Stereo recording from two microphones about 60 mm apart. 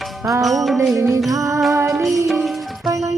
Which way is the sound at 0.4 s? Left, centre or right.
Centre.